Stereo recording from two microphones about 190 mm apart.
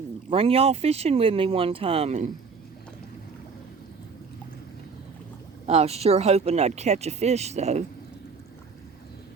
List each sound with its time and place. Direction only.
0.3 s speech: 30° right (ahead or behind)
5.6 s speech: 35° right (ahead or behind)